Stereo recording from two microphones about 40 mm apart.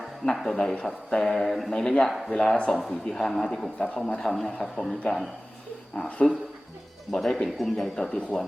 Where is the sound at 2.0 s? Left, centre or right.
Centre.